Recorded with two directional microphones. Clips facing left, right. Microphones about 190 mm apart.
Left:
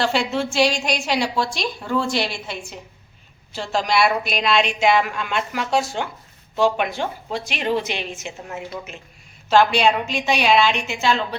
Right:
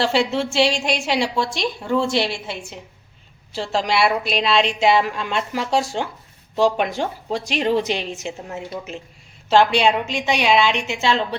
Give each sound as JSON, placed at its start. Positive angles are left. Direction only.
{"t": 0.0, "sound": "a woman's voice", "side_deg": -30}
{"t": 9.5, "sound": "a woman's voice", "side_deg": -25}